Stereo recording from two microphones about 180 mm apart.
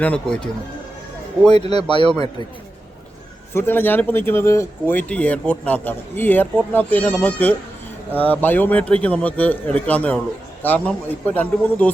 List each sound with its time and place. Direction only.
0.0 s speech: 5° left (ahead or behind)
1.7 s speech: 25° left (ahead or behind)
3.5 s speech: 10° left (ahead or behind)